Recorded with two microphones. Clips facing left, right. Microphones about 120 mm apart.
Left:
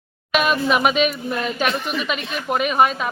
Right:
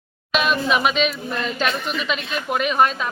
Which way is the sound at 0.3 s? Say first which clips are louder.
Left 1 dB; 5° left (ahead or behind).